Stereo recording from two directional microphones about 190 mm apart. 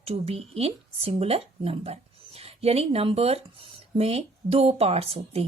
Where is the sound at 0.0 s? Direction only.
30° right (ahead or behind).